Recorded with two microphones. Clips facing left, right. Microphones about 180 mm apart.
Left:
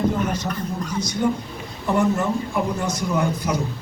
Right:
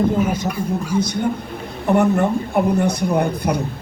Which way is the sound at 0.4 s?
10° right (ahead or behind).